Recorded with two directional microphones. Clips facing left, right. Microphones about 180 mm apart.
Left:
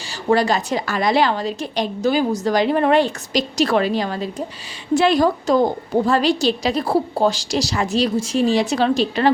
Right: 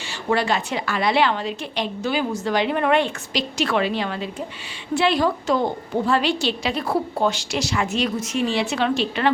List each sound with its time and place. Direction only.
0.3 s a woman's voice: 40° left (ahead or behind)